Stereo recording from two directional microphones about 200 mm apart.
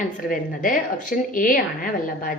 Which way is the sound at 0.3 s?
45° left (ahead or behind).